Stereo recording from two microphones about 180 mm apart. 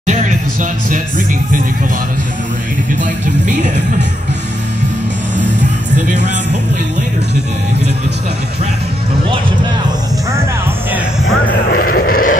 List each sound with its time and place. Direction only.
0.0 s music: 40° right (ahead or behind)
3.4 s speech: 40° right (ahead or behind)
11.7 s a sound: 55° left (ahead or behind)